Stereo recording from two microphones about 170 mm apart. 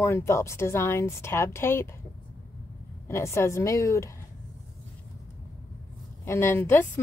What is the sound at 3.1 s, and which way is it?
A woman's voice, 15° left (ahead or behind).